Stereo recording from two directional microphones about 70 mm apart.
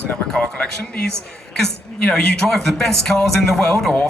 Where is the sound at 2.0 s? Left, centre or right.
Centre.